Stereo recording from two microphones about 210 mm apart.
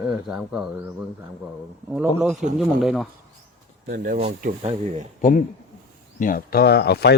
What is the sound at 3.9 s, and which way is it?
Speech, 35° right (ahead or behind).